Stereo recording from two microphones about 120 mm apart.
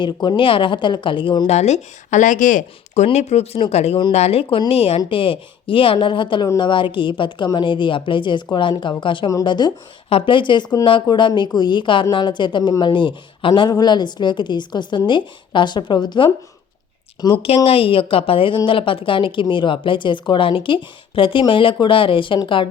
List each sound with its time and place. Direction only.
0.0 s speech: 40° left (ahead or behind)
1.5 s speech: 65° left (ahead or behind)
4.4 s a woman's voice: 40° left (ahead or behind)
4.7 s a woman's voice: 55° left (ahead or behind); by 16.3 s 40° left (ahead or behind)
17.4 s speech: 50° left (ahead or behind)